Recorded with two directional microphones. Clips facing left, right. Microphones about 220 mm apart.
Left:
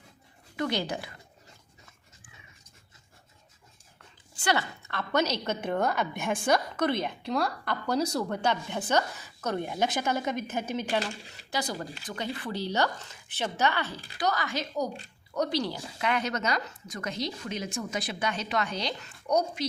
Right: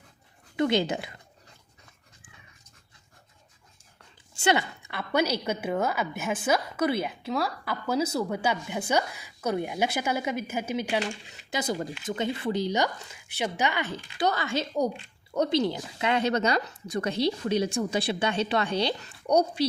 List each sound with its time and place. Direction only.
0.5 s speech: 25° right (ahead or behind)
4.4 s a woman's voice: 20° right (ahead or behind)
11.5 s a woman's voice: 20° right (ahead or behind)
14.2 s a woman's voice: 25° right (ahead or behind)